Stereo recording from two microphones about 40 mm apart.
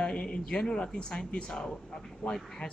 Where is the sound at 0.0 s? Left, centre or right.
Left.